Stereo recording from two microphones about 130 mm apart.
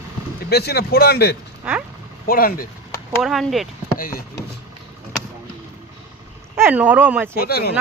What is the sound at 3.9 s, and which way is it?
Speech, 90° left.